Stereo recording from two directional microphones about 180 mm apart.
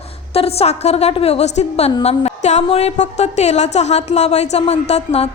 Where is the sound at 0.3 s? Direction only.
35° left (ahead or behind).